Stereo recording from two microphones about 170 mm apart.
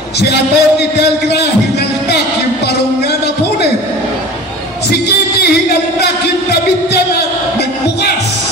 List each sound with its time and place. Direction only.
0.2 s speech: 75° left (ahead or behind)